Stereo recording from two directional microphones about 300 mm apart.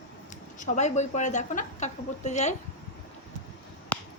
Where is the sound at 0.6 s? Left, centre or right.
Left.